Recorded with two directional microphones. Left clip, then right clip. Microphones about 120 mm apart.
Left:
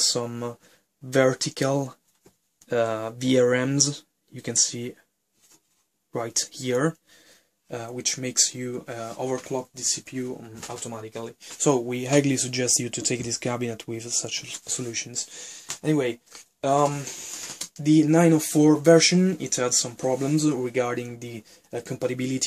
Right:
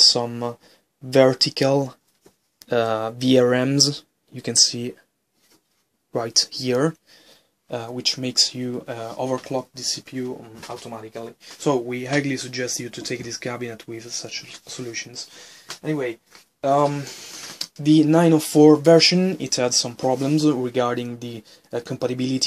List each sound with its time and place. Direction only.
0.0 s speech: 15° right (ahead or behind)
2.7 s speech: 30° right (ahead or behind)
6.1 s speech: 25° right (ahead or behind)
11.0 s speech: 15° left (ahead or behind)
12.1 s speech: 40° left (ahead or behind)
14.7 s speech: 25° left (ahead or behind)
15.8 s speech: 55° left (ahead or behind)
17.6 s speech: 35° right (ahead or behind)